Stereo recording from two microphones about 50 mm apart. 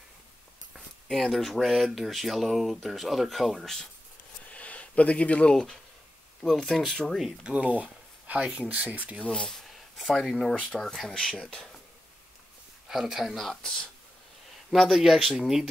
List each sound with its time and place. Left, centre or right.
1.0 s speech: centre
4.5 s a sound: left
5.5 s speech: centre
7.4 s speech: right
9.2 s speech: centre
9.7 s a sound: centre
10.7 s speech: centre
12.8 s a woman's voice: centre
13.4 s speech: centre
14.7 s speech: centre